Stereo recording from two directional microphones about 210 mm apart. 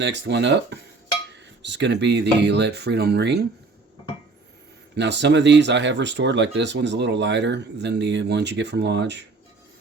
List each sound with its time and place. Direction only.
0.0 s speech: 55° right (ahead or behind)
4.9 s speech: 55° right (ahead or behind)